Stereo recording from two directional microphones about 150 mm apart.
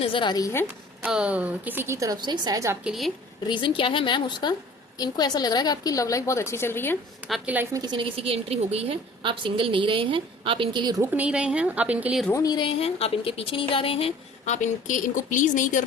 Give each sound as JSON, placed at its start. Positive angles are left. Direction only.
{"t": 0.0, "sound": "a woman's voice", "side_deg": 35}
{"t": 1.0, "sound": "a woman's voice", "side_deg": -5}
{"t": 2.8, "sound": "a woman's voice", "side_deg": 0}
{"t": 3.4, "sound": "music", "side_deg": 30}
{"t": 4.9, "sound": "a woman's voice", "side_deg": 25}
{"t": 7.3, "sound": "a woman's voice", "side_deg": 0}
{"t": 7.5, "sound": "a woman's voice", "side_deg": -20}
{"t": 11.1, "sound": "a woman's voice", "side_deg": -10}
{"t": 12.3, "sound": "a woman's voice", "side_deg": 25}
{"t": 12.6, "sound": "music", "side_deg": 40}
{"t": 14.4, "sound": "a woman's voice", "side_deg": 55}